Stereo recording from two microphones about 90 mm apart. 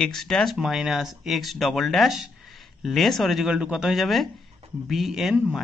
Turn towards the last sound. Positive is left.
turn(degrees=-5)  # may be behind; listen again after turning